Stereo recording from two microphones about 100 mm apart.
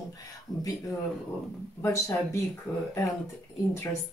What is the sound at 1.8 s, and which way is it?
Speech, 30° left (ahead or behind).